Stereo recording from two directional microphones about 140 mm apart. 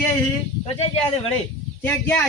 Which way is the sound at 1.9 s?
15° left (ahead or behind).